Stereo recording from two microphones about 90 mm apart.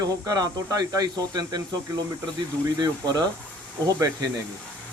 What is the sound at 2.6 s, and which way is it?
Speech, 50° right (ahead or behind).